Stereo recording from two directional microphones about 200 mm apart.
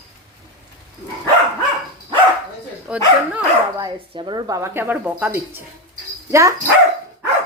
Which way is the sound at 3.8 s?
25° right (ahead or behind).